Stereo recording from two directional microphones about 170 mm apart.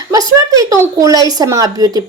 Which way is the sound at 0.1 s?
20° right (ahead or behind).